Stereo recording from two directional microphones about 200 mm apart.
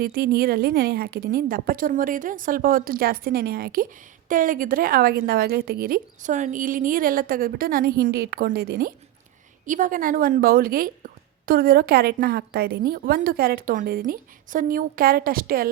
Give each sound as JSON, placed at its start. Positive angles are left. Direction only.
{"t": 0.0, "sound": "speech", "side_deg": -50}